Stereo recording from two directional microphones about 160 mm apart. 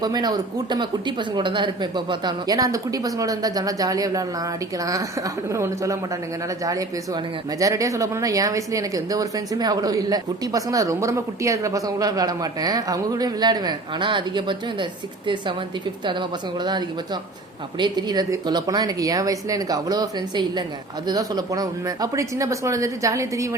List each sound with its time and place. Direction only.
0.0 s speech: 25° right (ahead or behind)
17.7 s speech: 30° right (ahead or behind)